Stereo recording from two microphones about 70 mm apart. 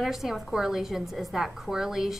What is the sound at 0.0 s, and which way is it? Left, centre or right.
A woman's voice, centre.